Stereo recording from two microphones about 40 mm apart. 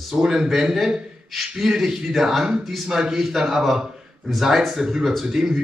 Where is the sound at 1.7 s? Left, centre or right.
Centre.